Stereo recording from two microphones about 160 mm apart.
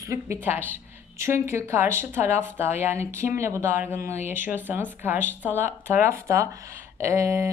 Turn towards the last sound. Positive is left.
turn(degrees=-15)  # may be behind; listen again after turning